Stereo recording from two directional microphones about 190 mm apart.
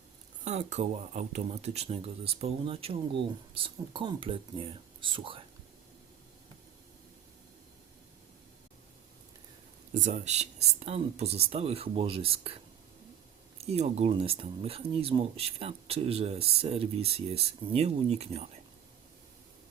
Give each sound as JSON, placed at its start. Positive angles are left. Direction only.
{"t": 0.4, "sound": "speech", "side_deg": -40}
{"t": 9.9, "sound": "speech", "side_deg": -40}
{"t": 13.6, "sound": "speech", "side_deg": -35}